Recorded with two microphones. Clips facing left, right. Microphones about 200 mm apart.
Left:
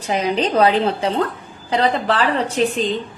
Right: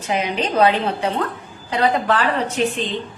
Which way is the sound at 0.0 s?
35° left (ahead or behind).